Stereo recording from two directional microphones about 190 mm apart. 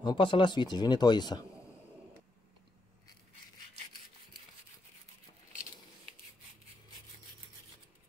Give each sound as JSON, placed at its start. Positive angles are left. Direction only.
{"t": 0.0, "sound": "speech", "side_deg": 25}